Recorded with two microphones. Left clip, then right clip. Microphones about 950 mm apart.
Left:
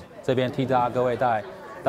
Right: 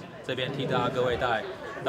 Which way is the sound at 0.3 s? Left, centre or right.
Left.